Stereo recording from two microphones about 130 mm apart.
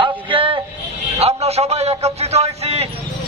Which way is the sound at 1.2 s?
55° right (ahead or behind).